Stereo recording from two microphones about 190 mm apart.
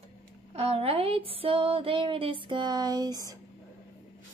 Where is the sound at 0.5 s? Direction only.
30° right (ahead or behind).